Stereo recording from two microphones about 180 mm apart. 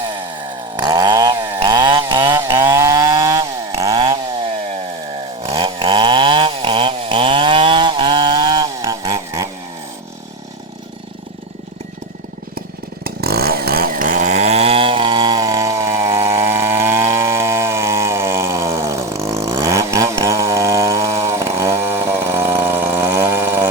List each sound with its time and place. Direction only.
0.8 s chainsaw: 20° right (ahead or behind)
5.4 s chainsaw: 30° right (ahead or behind)
13.1 s vehicle: 60° right (ahead or behind); by 23.6 s 15° right (ahead or behind)